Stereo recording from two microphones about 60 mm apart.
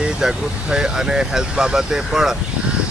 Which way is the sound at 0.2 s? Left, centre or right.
Centre.